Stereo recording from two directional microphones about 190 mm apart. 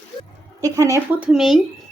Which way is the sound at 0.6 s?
15° right (ahead or behind).